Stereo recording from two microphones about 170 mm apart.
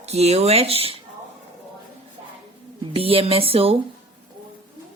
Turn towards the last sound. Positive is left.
turn(degrees=-35)  # may be behind; listen again after turning